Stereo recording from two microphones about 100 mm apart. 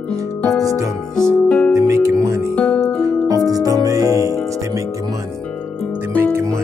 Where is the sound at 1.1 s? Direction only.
10° left (ahead or behind).